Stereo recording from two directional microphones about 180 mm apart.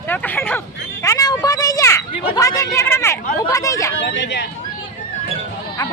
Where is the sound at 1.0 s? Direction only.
20° left (ahead or behind).